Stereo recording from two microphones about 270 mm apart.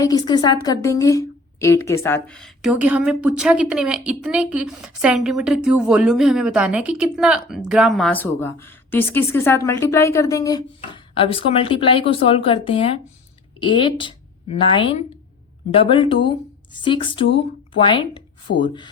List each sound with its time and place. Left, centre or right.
0.0 s a woman's voice: centre